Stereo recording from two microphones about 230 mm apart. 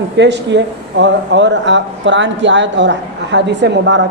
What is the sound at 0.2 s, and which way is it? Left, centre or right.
A woman's voice, right.